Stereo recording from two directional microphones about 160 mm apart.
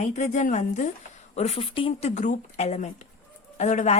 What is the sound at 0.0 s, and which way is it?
Speech, 45° left (ahead or behind).